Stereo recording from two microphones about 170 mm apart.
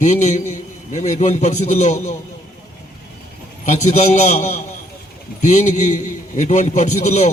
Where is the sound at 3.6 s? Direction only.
45° left (ahead or behind).